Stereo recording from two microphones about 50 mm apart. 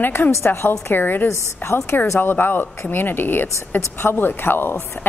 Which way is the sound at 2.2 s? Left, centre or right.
Left.